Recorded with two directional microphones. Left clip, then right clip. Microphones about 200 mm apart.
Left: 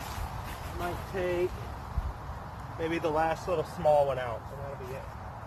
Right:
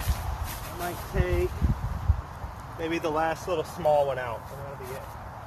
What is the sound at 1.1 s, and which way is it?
Speech, 20° right (ahead or behind).